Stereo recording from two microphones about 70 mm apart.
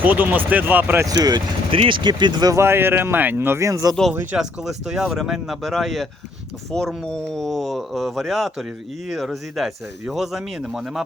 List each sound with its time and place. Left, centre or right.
0.0 s speech: right
1.0 s speech: right
2.0 s speech: right
2.6 s speech: right
4.4 s speech: centre